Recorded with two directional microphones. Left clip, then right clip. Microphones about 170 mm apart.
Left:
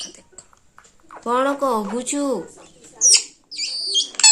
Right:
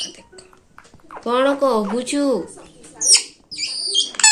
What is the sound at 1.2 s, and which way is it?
Speech, 20° left (ahead or behind).